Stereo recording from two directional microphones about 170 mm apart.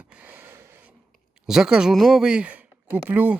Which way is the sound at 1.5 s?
5° right (ahead or behind).